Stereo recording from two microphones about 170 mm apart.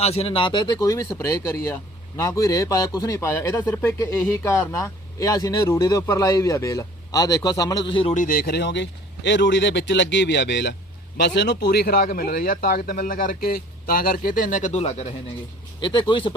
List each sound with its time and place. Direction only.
0.0 s speech: 35° left (ahead or behind)
8.1 s speech: 55° left (ahead or behind)
15.8 s speech: 30° left (ahead or behind)